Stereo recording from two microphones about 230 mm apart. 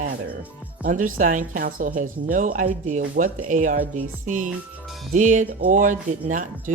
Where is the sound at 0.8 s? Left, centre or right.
Right.